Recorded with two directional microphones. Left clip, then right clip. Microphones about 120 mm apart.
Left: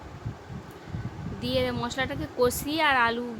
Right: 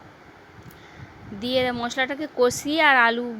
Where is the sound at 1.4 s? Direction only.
55° right (ahead or behind).